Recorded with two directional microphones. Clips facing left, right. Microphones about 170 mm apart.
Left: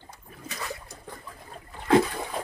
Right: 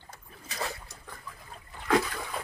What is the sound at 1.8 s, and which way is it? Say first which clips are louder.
Splash: left 6 dB; 30° left (ahead or behind).